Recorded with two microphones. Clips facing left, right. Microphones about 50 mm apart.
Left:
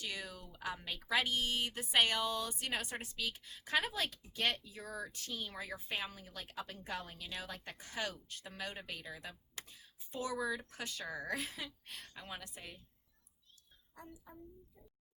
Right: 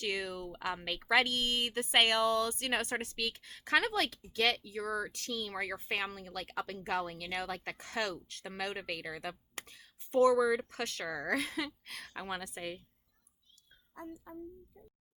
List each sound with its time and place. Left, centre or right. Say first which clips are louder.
0.0 s speech: right 8 dB; right
13.9 s speech: right 8 dB; right